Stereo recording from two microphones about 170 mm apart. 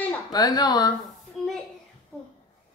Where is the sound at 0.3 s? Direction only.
20° left (ahead or behind).